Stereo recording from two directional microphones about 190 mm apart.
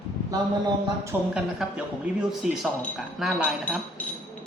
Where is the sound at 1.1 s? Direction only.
5° right (ahead or behind).